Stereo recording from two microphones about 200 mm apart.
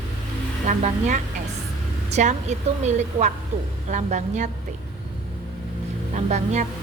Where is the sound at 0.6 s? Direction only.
40° right (ahead or behind).